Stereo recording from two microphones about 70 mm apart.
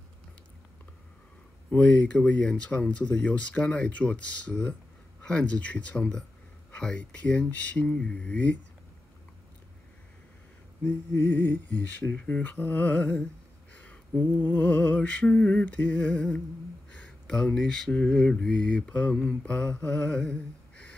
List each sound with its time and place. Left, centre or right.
1.7 s speech: centre
10.8 s speech: left
13.7 s a sound: left
14.4 s speech: left